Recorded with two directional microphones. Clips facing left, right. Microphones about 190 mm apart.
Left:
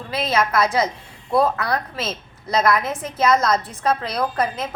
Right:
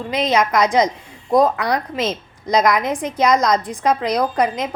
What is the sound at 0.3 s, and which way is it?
A woman's voice, 15° right (ahead or behind).